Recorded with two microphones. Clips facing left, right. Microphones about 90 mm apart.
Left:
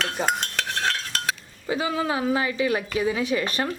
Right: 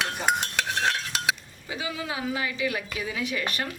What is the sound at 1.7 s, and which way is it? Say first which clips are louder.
Speech: left 8 dB; 40° left (ahead or behind).